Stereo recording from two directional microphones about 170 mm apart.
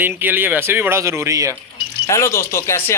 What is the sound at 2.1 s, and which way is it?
Speech, 15° left (ahead or behind).